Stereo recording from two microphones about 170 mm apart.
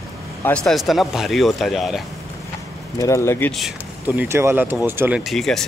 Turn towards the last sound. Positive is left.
turn(degrees=0)  # may be behind; listen again after turning